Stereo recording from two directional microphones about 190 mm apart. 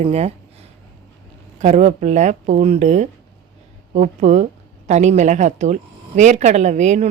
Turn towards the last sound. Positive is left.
turn(degrees=-40)  # may be behind; listen again after turning